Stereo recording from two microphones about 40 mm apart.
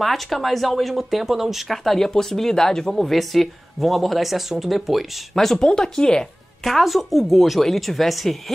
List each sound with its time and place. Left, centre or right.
0.0 s speech: centre
1.9 s speech: centre
3.0 s speech: centre
5.3 s speech: centre
6.8 s speech: centre